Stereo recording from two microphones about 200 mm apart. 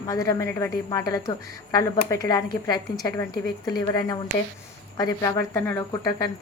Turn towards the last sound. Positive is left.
turn(degrees=20)  # may be behind; listen again after turning